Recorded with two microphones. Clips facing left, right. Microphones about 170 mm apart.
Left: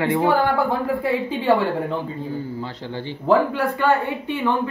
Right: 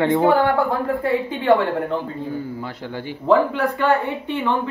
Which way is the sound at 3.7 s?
Centre (ahead or behind).